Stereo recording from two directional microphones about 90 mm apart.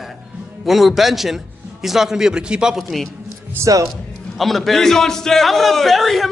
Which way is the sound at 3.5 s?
35° right (ahead or behind).